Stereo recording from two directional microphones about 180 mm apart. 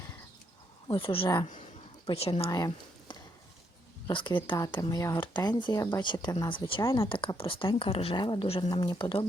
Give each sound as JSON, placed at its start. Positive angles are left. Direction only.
{"t": 0.9, "sound": "a woman's voice", "side_deg": 30}
{"t": 2.5, "sound": "a sound", "side_deg": 20}
{"t": 4.0, "sound": "speech", "side_deg": 25}
{"t": 6.8, "sound": "speech", "side_deg": 15}
{"t": 7.1, "sound": "speech", "side_deg": 30}